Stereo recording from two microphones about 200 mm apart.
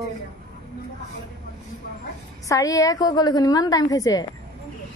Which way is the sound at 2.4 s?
15° left (ahead or behind).